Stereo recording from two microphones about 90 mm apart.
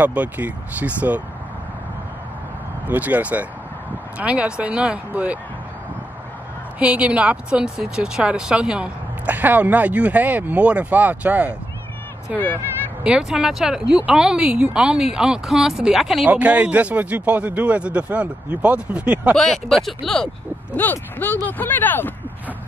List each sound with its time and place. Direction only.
0.0 s speech: 15° right (ahead or behind)
2.9 s speech: 20° right (ahead or behind)
6.8 s speech: 15° right (ahead or behind)
13.0 s speech: 5° right (ahead or behind)
16.3 s speech: 15° right (ahead or behind)
19.3 s speech: 5° left (ahead or behind)
20.7 s speech: 20° left (ahead or behind)